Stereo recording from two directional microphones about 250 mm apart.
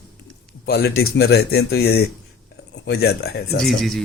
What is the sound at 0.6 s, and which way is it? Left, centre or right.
Speech, left.